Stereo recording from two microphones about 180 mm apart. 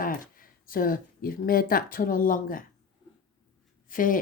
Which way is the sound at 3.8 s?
50° left (ahead or behind).